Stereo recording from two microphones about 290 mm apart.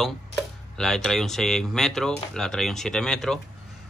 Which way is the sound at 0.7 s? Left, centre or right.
Centre.